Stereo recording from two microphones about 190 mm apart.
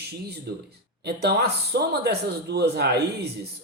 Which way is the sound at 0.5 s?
60° right (ahead or behind).